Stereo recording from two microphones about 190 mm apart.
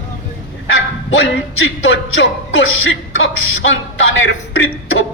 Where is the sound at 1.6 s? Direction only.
90° left.